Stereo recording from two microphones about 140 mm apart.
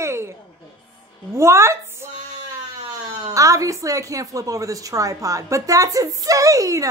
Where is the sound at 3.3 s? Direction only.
25° right (ahead or behind).